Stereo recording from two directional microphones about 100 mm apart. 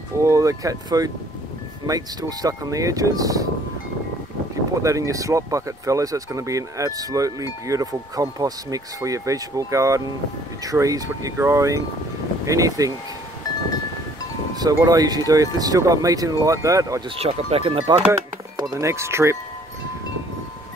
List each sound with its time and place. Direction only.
0.2 s speech: 30° right (ahead or behind)
4.8 s speech: 35° right (ahead or behind)
14.6 s speech: 40° right (ahead or behind)
17.2 s speech: 80° right
18.6 s speech: 35° right (ahead or behind)